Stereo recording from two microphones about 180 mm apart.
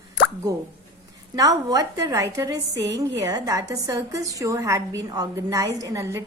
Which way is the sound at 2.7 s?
75° right (ahead or behind).